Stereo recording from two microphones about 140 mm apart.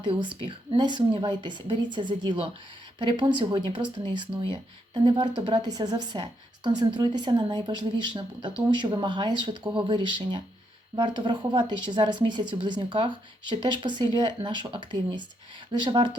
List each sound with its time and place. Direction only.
0.0 s speech: 35° right (ahead or behind)